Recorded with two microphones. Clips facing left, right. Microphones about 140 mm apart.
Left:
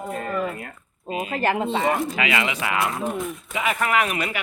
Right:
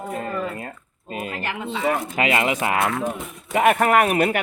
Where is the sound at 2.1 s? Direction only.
45° right (ahead or behind).